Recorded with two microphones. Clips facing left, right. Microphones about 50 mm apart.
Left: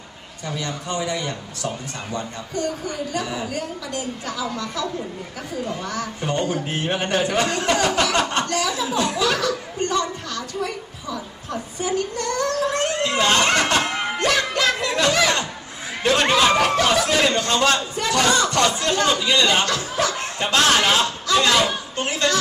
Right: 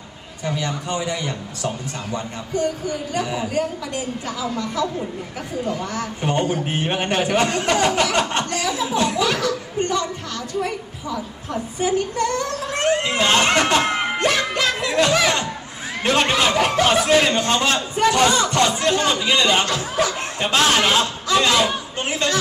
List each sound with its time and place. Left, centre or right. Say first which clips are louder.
0.5 s a man's voice: right 3 dB; right
5.9 s a man's voice: right 2 dB; right
6.7 s a man's voice: right 1 dB; right
11.8 s a sound: right 4 dB; right
16.6 s a man's voice: right 1 dB; right